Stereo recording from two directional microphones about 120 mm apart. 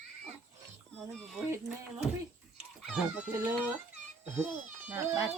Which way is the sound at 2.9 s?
10° right (ahead or behind).